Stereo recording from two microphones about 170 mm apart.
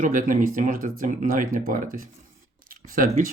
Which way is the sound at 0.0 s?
50° right (ahead or behind).